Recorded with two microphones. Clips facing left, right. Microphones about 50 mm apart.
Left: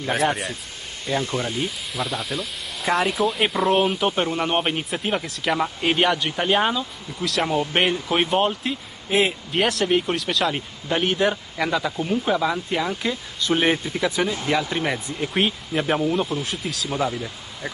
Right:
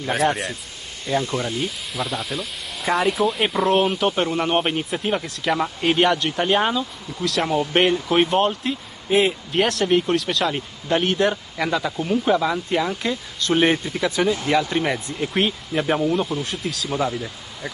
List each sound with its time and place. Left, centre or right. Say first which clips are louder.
0.1 s speech: right 1 dB; centre
1.2 s speech: right 1 dB; right
2.0 s speech: right 1 dB; centre